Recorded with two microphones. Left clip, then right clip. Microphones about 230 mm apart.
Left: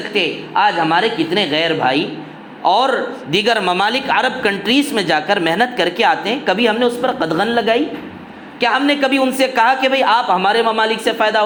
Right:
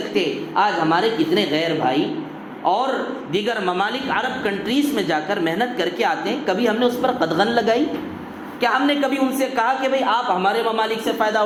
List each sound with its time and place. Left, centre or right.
0.1 s speech: left